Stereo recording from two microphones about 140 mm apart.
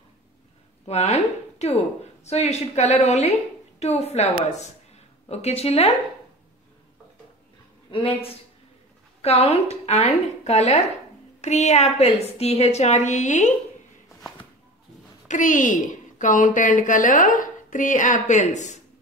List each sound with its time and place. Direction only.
0.8 s a woman's voice: 50° left (ahead or behind)
7.9 s a woman's voice: 40° left (ahead or behind); by 13.5 s 60° left (ahead or behind)
15.2 s a woman's voice: 65° left (ahead or behind)